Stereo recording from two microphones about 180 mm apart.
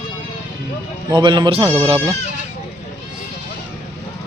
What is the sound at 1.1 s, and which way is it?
Speech, 25° right (ahead or behind).